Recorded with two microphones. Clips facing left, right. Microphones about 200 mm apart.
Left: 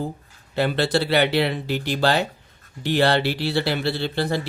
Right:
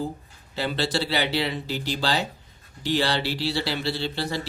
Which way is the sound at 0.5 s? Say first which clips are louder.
Left 5 dB; 55° left (ahead or behind).